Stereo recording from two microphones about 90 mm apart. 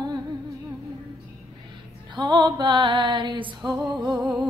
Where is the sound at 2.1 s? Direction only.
60° right (ahead or behind).